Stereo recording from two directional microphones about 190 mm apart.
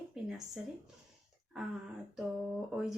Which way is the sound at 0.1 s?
Centre (ahead or behind).